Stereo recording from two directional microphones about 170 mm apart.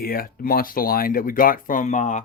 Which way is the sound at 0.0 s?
60° left (ahead or behind).